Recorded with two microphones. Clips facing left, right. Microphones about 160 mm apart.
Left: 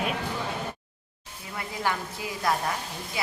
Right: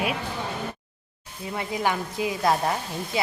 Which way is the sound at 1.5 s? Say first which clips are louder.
Right 4 dB; 20° right (ahead or behind).